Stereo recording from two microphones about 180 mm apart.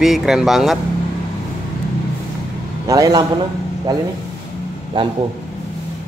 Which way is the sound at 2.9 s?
20° right (ahead or behind).